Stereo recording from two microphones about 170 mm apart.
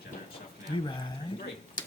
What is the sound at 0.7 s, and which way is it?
Speech, 25° left (ahead or behind).